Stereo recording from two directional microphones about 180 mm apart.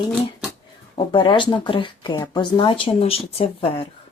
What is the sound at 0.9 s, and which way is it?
Speech, 30° left (ahead or behind).